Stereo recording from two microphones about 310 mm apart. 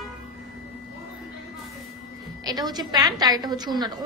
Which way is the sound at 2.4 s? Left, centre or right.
Centre.